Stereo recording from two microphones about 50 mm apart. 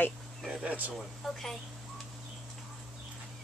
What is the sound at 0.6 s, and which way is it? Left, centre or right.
Speech, right.